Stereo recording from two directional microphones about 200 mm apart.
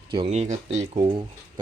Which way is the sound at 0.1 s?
30° right (ahead or behind).